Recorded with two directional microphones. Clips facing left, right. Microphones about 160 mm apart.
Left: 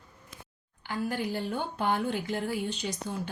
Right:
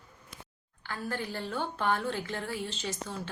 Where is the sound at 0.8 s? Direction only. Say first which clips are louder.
Left 4 dB; 15° left (ahead or behind).